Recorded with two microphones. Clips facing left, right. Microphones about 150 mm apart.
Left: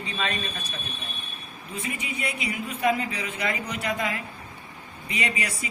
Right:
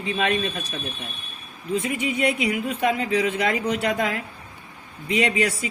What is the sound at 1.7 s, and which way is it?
Speech, 65° right (ahead or behind).